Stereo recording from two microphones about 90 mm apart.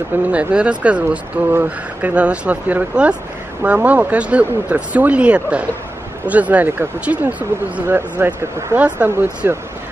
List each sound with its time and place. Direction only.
0.3 s speech: 15° right (ahead or behind)